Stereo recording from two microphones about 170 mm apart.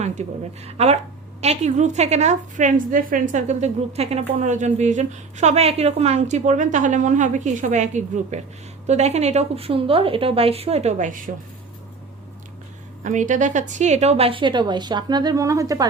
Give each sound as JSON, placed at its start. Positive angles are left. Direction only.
{"t": 0.0, "sound": "a woman's voice", "side_deg": -40}
{"t": 13.1, "sound": "a woman's voice", "side_deg": -45}